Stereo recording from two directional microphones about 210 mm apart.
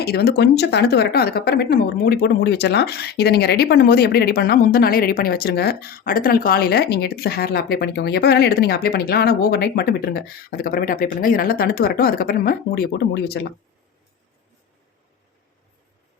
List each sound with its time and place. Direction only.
0.0 s speech: 50° left (ahead or behind)